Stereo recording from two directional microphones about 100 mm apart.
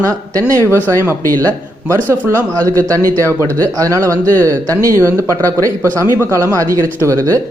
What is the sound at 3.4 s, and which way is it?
Speech, 35° right (ahead or behind).